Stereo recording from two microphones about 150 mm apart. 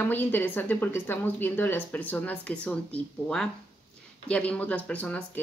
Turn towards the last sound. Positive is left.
turn(degrees=10)  # may be behind; listen again after turning